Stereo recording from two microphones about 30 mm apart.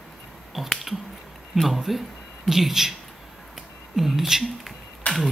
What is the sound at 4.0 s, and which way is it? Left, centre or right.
Speech, centre.